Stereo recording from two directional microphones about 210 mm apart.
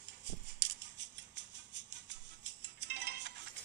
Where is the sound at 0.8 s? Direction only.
55° right (ahead or behind).